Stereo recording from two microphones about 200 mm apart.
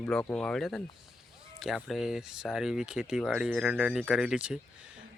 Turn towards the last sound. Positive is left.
turn(degrees=-5)  # may be behind; listen again after turning